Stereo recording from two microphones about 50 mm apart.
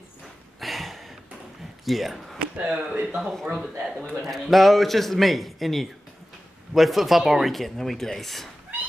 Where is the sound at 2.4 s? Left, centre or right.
Centre.